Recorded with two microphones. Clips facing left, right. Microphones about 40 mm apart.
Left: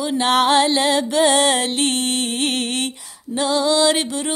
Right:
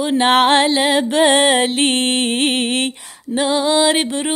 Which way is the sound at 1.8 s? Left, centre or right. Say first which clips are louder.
Right 4 dB; right.